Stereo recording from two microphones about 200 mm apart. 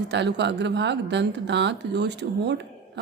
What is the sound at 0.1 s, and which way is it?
A woman's voice, 60° right (ahead or behind).